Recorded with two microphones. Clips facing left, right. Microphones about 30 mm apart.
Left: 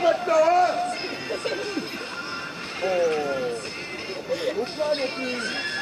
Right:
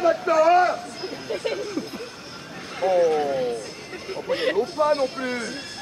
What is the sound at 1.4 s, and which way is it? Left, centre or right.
Music, left.